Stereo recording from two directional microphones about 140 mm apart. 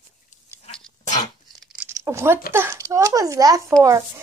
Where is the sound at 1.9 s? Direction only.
20° right (ahead or behind).